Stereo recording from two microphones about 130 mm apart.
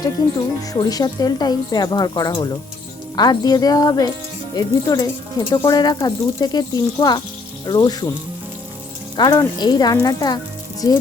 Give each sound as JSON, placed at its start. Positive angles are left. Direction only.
{"t": 0.7, "sound": "speech", "side_deg": 30}
{"t": 9.1, "sound": "speech", "side_deg": 35}